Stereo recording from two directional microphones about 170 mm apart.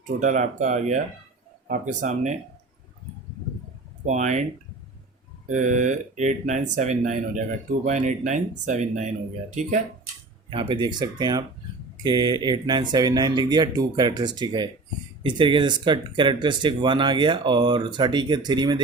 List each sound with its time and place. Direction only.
0.0 s speech: 45° right (ahead or behind)
4.0 s speech: 45° right (ahead or behind)
5.5 s speech: 45° right (ahead or behind)
10.5 s speech: 30° right (ahead or behind)